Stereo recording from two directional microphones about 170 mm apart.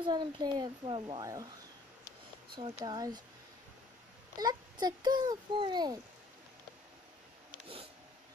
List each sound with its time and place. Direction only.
0.0 s a child's voice: 25° right (ahead or behind)
2.8 s a child's voice: 25° right (ahead or behind)
4.4 s a child's voice: 25° right (ahead or behind)